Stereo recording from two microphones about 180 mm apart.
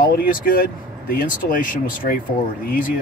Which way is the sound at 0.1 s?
55° left (ahead or behind).